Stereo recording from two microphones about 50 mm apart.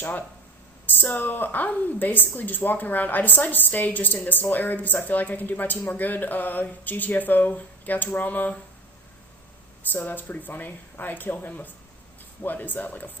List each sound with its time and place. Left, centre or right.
0.0 s a woman's voice: left
9.9 s a woman's voice: left